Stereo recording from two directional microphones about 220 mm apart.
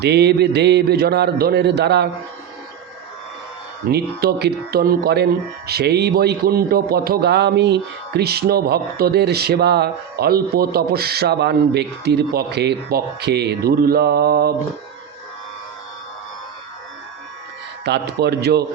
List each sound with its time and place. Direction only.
0.0 s speech: 50° right (ahead or behind)
3.8 s speech: 45° right (ahead or behind)
17.8 s speech: 50° right (ahead or behind)